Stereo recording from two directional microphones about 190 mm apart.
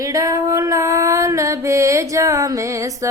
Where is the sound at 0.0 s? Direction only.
15° right (ahead or behind).